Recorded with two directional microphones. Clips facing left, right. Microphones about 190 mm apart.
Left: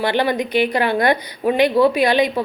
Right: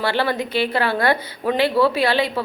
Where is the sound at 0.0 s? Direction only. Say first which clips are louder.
Left 3 dB; 15° left (ahead or behind).